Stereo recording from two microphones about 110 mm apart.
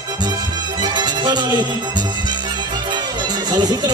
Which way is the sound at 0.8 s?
40° right (ahead or behind).